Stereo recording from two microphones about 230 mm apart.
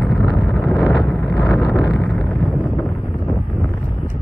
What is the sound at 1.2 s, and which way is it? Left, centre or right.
Wind noise, centre.